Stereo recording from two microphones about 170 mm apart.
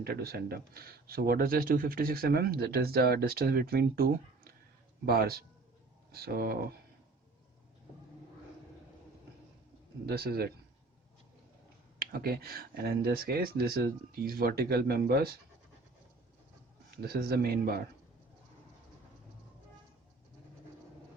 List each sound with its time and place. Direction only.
0.0 s speech: 65° right (ahead or behind)
10.1 s speech: 65° right (ahead or behind)
11.9 s speech: 60° right (ahead or behind)
17.1 s speech: 65° right (ahead or behind)